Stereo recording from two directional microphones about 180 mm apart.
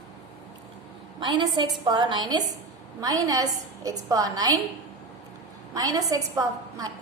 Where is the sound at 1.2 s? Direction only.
25° right (ahead or behind).